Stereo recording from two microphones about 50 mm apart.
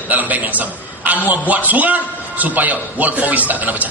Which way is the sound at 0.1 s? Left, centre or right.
Right.